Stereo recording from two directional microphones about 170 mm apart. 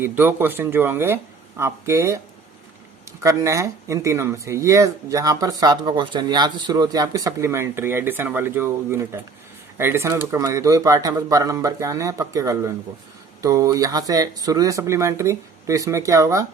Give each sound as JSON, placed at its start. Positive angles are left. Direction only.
{"t": 0.0, "sound": "speech", "side_deg": -10}
{"t": 3.2, "sound": "speech", "side_deg": -20}